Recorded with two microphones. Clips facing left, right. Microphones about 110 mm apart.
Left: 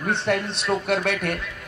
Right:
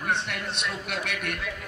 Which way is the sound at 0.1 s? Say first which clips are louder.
Left 7 dB; 30° left (ahead or behind).